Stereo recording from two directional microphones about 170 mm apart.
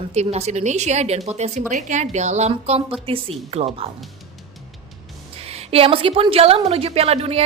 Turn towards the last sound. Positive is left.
turn(degrees=-35)  # may be behind; listen again after turning